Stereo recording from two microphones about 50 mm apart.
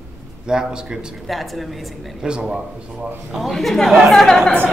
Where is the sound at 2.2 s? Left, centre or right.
Centre.